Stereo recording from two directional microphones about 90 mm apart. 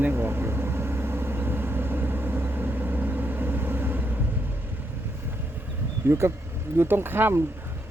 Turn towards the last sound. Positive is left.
turn(degrees=-25)  # may be behind; listen again after turning